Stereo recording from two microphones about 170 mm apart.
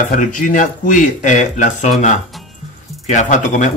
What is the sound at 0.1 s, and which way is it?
Speech, 50° left (ahead or behind).